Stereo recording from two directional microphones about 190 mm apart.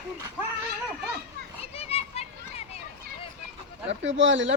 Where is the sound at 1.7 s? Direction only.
35° left (ahead or behind).